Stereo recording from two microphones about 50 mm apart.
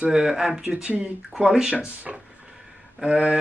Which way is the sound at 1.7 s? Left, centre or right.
Right.